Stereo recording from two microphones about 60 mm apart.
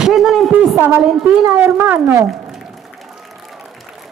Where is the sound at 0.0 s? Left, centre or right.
Centre.